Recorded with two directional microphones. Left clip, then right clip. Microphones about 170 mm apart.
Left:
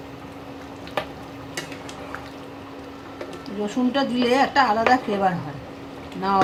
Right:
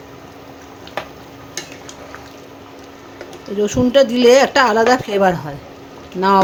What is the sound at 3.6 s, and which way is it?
A woman's voice, 90° right.